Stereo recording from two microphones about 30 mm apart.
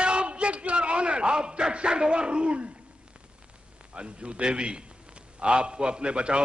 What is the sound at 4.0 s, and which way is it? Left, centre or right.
A man's voice, right.